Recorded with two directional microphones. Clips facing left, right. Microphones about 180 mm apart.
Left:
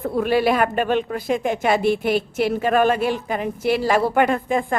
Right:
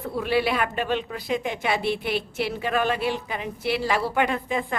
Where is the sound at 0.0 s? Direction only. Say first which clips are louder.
Left 5 dB; 50° left (ahead or behind).